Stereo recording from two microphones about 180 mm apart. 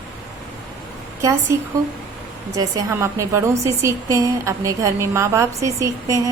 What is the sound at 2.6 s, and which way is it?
A woman's voice, 15° right (ahead or behind).